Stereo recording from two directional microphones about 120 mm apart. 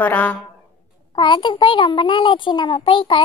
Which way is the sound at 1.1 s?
40° left (ahead or behind).